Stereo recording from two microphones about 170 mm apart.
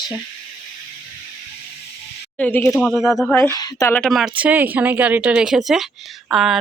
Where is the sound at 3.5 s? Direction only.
20° left (ahead or behind).